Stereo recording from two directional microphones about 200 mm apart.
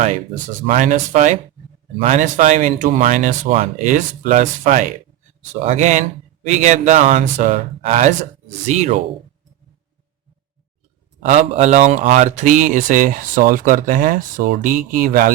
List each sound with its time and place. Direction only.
0.7 s speech: 40° right (ahead or behind)
11.3 s speech: 35° right (ahead or behind)